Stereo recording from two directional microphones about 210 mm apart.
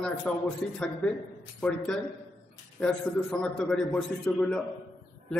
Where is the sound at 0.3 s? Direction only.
5° left (ahead or behind).